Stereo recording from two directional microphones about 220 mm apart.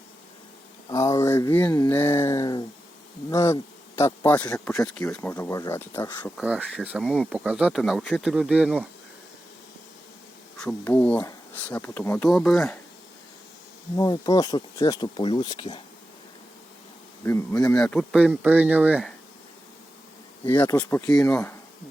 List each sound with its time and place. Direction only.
0.9 s speech: 15° left (ahead or behind)
6.4 s speech: 5° right (ahead or behind)
10.6 s speech: 5° left (ahead or behind)
13.9 s speech: 15° left (ahead or behind)
17.2 s speech: 10° left (ahead or behind); by 19.1 s 5° right (ahead or behind)
20.5 s speech: 10° left (ahead or behind)